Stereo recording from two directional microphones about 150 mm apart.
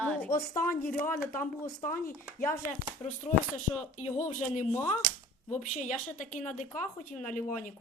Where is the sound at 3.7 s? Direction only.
25° left (ahead or behind).